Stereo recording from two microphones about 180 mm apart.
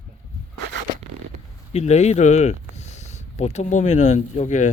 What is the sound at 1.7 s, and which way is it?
Speech, 40° left (ahead or behind).